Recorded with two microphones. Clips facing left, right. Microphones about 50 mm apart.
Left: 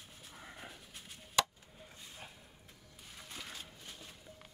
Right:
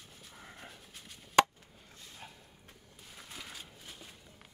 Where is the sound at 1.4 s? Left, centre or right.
Right.